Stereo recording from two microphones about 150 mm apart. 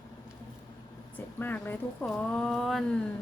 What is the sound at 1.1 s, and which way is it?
Speech, 10° left (ahead or behind).